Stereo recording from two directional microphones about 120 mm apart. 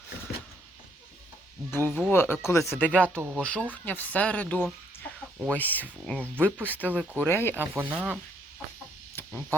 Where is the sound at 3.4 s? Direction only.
10° left (ahead or behind).